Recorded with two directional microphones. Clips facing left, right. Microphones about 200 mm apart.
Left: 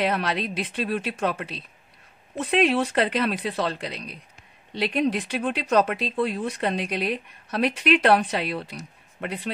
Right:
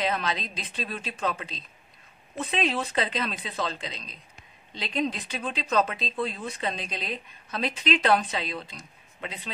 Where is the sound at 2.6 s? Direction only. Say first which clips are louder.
Left 6 dB; 65° left (ahead or behind).